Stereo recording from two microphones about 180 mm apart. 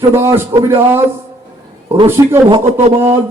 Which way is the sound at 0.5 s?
25° right (ahead or behind).